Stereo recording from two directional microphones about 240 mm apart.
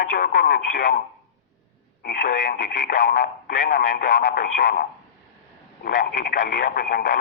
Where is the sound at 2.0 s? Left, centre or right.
Left.